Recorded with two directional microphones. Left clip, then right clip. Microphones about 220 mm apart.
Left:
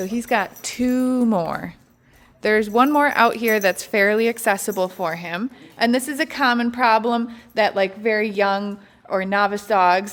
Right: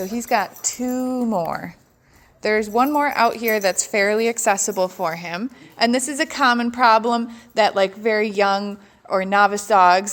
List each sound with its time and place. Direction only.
0.0 s a woman's voice: 20° left (ahead or behind)
0.7 s speech: 35° left (ahead or behind)
1.5 s a woman's voice: 15° left (ahead or behind)